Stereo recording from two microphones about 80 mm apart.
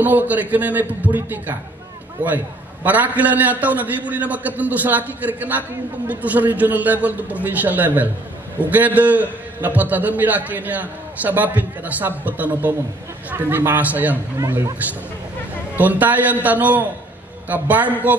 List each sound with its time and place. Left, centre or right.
0.0 s a man's voice: right
15.8 s a man's voice: right